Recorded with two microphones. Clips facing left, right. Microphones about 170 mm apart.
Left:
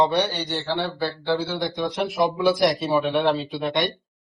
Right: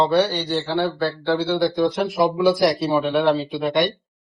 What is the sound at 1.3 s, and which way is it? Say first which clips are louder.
Speech: right 5 dB; centre (ahead or behind).